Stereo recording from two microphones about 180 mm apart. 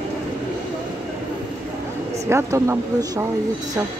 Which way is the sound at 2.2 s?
15° right (ahead or behind).